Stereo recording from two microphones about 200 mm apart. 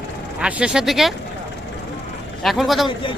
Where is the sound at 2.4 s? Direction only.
Centre (ahead or behind).